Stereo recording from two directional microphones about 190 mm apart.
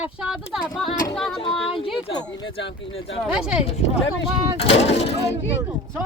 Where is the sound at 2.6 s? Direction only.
85° left.